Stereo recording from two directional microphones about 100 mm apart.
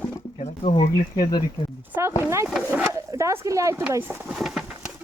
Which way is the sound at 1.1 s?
45° left (ahead or behind).